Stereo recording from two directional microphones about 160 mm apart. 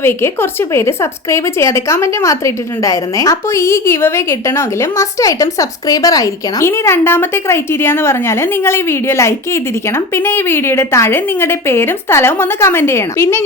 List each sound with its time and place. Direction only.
0.7 s a woman's voice: 15° left (ahead or behind)